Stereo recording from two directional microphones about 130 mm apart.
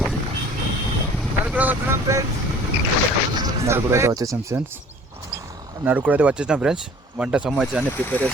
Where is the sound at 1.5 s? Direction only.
15° right (ahead or behind).